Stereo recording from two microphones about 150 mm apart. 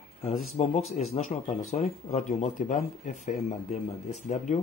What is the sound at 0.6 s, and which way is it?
Speech, 50° left (ahead or behind).